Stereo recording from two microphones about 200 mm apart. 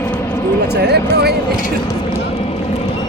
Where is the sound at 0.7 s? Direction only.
55° right (ahead or behind).